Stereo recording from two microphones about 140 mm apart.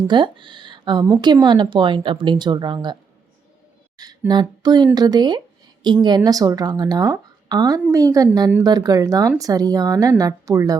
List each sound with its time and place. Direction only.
0.1 s speech: 35° right (ahead or behind)
3.9 s a sound: 30° right (ahead or behind)
4.3 s speech: 30° right (ahead or behind)